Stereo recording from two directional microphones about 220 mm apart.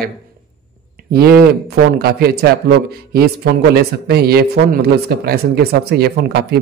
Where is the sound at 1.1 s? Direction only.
45° right (ahead or behind).